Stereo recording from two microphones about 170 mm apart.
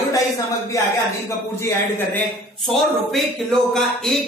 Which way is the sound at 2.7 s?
Centre (ahead or behind).